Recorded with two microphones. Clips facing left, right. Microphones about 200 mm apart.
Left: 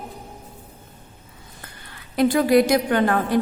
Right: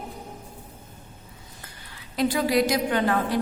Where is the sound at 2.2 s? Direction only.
55° left (ahead or behind).